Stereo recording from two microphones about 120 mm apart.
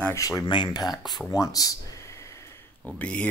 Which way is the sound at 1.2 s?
30° left (ahead or behind).